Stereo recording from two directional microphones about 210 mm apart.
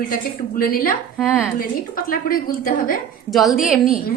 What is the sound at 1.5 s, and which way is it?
A woman's voice, 45° left (ahead or behind).